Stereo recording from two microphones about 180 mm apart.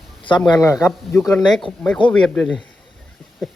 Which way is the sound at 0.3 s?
25° left (ahead or behind).